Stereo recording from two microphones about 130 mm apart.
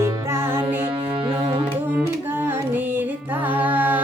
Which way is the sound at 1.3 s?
45° right (ahead or behind).